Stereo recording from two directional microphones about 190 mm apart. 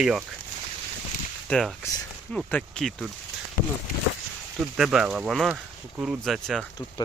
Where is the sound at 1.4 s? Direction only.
5° left (ahead or behind).